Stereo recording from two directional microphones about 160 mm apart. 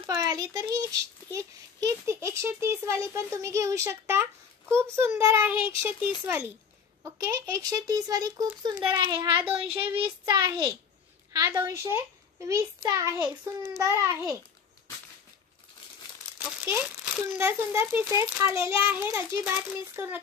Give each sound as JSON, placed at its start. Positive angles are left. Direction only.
{"t": 0.0, "sound": "speech", "side_deg": -25}
{"t": 5.5, "sound": "speech", "side_deg": 30}
{"t": 5.9, "sound": "speech", "side_deg": -15}
{"t": 9.4, "sound": "speech", "side_deg": -35}
{"t": 11.3, "sound": "speech", "side_deg": -20}
{"t": 16.6, "sound": "speech", "side_deg": -10}